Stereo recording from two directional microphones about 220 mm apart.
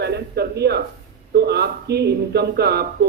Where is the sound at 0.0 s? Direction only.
50° right (ahead or behind).